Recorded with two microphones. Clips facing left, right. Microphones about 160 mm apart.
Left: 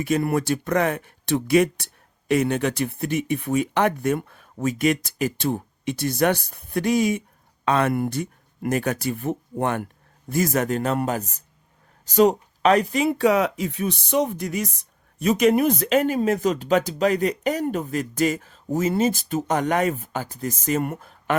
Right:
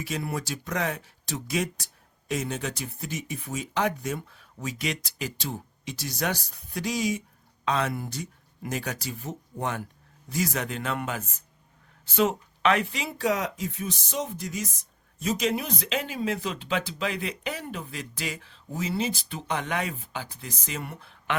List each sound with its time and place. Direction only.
0.0 s speech: 55° left (ahead or behind)